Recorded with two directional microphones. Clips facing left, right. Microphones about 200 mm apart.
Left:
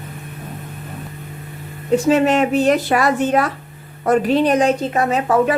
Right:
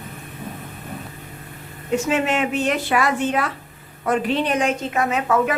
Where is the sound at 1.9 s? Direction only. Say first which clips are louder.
Left 6 dB; 35° left (ahead or behind).